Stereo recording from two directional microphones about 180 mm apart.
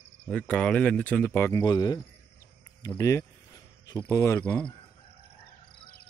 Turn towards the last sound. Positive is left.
turn(degrees=5)  # may be behind; listen again after turning